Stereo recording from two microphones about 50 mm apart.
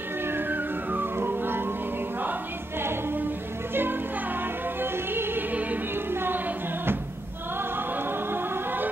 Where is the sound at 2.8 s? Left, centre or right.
Right.